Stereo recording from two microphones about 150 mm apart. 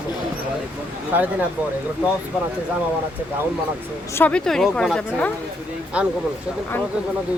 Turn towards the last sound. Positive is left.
turn(degrees=-10)  # may be behind; listen again after turning